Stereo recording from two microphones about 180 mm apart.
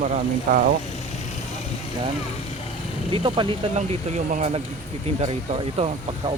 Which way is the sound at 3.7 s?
40° right (ahead or behind).